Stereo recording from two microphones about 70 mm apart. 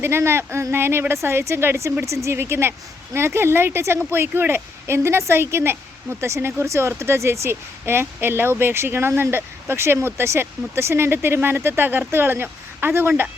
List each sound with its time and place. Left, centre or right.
0.0 s speech: right